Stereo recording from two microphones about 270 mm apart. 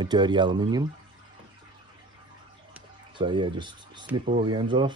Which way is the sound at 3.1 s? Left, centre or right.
Centre.